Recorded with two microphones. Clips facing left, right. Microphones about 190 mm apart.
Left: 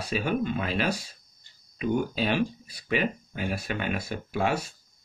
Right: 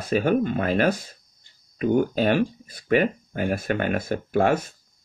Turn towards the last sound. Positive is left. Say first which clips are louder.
# right 7 dB
turn(degrees=-55)  # may be behind; listen again after turning